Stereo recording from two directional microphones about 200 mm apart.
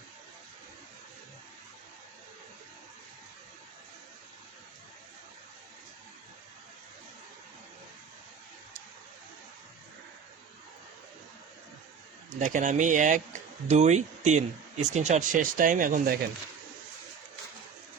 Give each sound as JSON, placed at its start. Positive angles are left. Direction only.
{"t": 12.4, "sound": "speech", "side_deg": -40}